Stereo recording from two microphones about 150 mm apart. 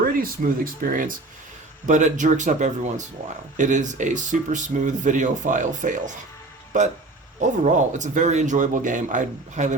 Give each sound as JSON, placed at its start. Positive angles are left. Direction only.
{"t": 0.0, "sound": "speech", "side_deg": -70}
{"t": 1.9, "sound": "speech", "side_deg": -55}
{"t": 7.6, "sound": "speech", "side_deg": -55}